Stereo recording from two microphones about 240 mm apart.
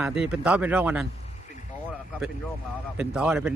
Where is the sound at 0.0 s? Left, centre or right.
Centre.